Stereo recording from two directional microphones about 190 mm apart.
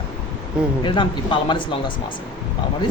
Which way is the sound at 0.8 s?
25° left (ahead or behind).